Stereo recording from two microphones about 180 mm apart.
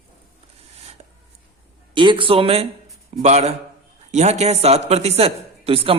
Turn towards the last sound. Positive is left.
turn(degrees=-30)  # may be behind; listen again after turning